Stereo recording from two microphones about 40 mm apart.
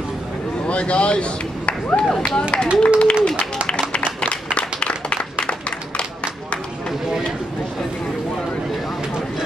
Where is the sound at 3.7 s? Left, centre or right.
Left.